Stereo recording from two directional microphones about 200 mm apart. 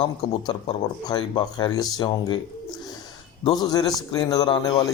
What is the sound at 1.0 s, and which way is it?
A man's voice, 20° left (ahead or behind).